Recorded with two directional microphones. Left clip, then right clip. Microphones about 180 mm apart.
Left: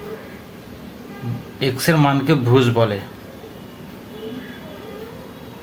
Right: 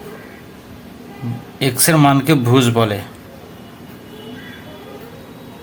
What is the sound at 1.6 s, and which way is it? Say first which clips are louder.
Speech: right 3 dB; 60° right (ahead or behind).